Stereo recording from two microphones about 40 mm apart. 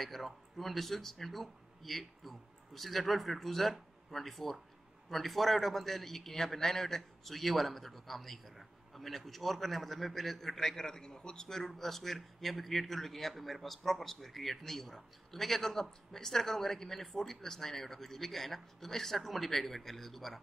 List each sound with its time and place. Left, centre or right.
0.0 s a man's voice: centre